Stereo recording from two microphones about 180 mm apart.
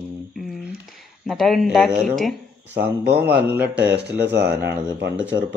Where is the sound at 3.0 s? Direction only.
65° right (ahead or behind).